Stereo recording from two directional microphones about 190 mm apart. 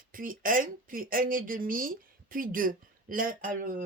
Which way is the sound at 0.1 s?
45° right (ahead or behind).